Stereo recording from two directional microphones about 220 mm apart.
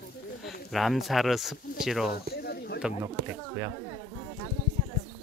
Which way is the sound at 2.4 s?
45° left (ahead or behind).